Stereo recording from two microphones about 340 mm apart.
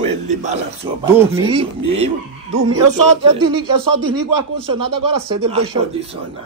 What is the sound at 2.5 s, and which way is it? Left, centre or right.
Speech, right.